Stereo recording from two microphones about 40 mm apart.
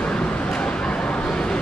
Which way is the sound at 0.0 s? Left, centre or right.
Left.